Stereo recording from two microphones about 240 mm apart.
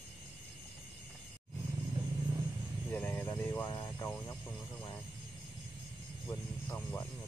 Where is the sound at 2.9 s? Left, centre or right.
Centre.